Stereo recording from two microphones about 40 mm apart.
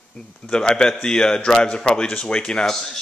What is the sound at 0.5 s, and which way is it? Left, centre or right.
Speech, left.